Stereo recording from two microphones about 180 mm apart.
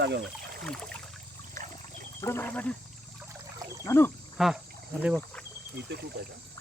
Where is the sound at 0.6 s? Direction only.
5° left (ahead or behind).